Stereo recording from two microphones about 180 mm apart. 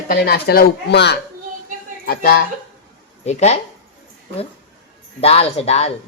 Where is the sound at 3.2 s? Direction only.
40° left (ahead or behind).